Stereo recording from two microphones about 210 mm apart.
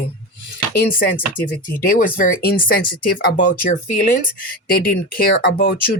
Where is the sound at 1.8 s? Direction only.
40° left (ahead or behind).